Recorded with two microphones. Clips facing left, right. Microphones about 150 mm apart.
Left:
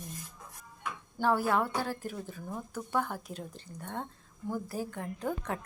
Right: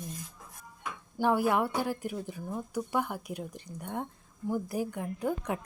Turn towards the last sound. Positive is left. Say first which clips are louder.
# right 3 dB
turn(degrees=-10)  # may be behind; listen again after turning